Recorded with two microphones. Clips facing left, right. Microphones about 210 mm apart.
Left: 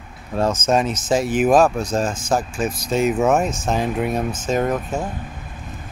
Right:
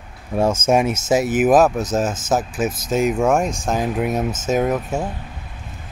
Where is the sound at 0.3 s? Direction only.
10° right (ahead or behind).